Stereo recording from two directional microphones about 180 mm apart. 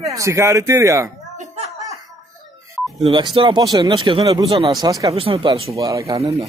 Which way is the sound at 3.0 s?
25° right (ahead or behind).